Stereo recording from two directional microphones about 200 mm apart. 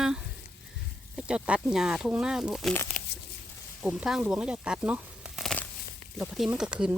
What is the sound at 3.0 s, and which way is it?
Tearing, 45° left (ahead or behind).